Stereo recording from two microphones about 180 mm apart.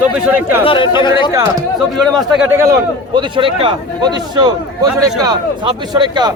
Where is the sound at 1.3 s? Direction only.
20° right (ahead or behind).